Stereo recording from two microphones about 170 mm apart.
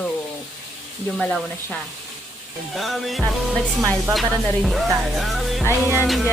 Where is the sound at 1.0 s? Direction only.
5° left (ahead or behind).